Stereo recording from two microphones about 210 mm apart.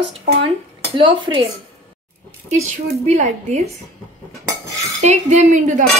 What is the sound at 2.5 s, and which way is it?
Speech, 30° right (ahead or behind).